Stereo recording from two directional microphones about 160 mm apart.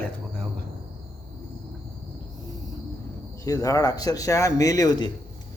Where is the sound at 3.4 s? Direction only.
20° left (ahead or behind).